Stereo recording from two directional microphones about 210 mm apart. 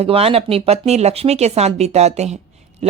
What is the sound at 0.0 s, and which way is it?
Speech, 30° right (ahead or behind).